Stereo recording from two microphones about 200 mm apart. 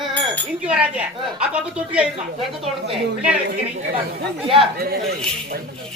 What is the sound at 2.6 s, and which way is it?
Speech, 30° right (ahead or behind).